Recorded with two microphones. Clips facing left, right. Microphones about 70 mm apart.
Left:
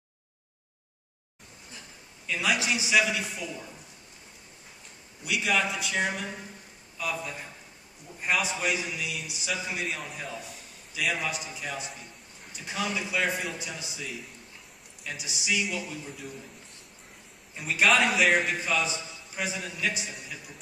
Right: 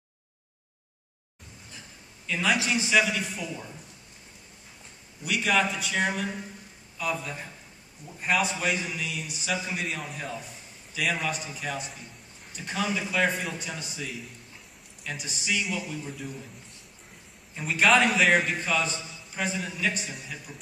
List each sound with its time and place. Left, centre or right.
2.2 s a man's voice: centre
5.2 s a man's voice: centre
18.0 s a man's voice: centre